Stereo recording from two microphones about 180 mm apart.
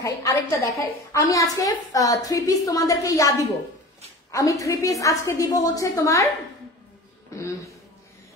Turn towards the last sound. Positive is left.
turn(degrees=15)  # may be behind; listen again after turning